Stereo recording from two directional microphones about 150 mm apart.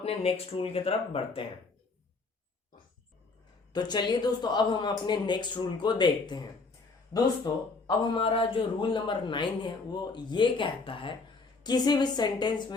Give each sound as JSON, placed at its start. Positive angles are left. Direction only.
{"t": 0.0, "sound": "a man's voice", "side_deg": 40}
{"t": 3.7, "sound": "speech", "side_deg": 30}
{"t": 7.9, "sound": "a man's voice", "side_deg": 35}